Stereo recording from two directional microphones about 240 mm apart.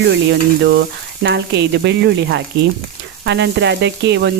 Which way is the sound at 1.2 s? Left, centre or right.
Right.